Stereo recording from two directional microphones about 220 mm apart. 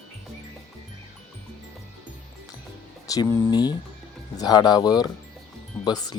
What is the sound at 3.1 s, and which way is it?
Speech, 15° left (ahead or behind).